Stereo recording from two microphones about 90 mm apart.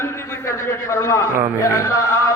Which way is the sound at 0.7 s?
30° left (ahead or behind).